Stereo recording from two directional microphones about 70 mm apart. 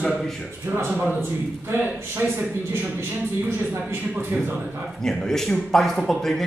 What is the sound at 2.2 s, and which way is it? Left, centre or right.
Speech, right.